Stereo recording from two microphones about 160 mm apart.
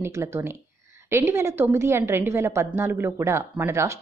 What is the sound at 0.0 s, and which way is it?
A woman's voice, 15° right (ahead or behind).